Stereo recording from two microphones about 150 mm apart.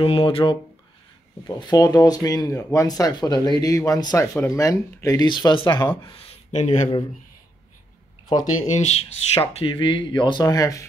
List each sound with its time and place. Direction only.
0.0 s speech: 40° left (ahead or behind)
1.5 s speech: 25° left (ahead or behind); by 7.0 s 50° left (ahead or behind)
8.7 s speech: 45° left (ahead or behind); by 10.9 s 20° left (ahead or behind)